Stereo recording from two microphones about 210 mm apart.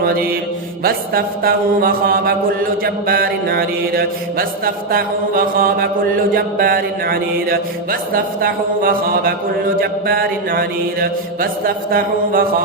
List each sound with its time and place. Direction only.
0.0 s mantra: 45° right (ahead or behind)